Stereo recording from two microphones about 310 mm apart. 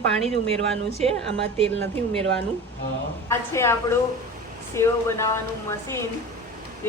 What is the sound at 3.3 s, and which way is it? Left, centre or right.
Speech, centre.